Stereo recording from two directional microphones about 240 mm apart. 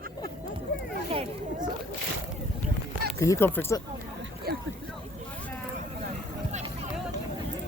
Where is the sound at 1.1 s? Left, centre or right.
Right.